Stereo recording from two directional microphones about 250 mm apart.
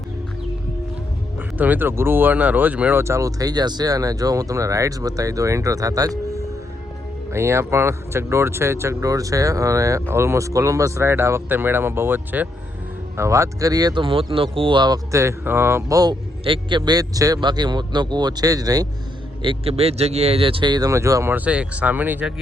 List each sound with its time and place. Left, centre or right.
1.4 s speech: centre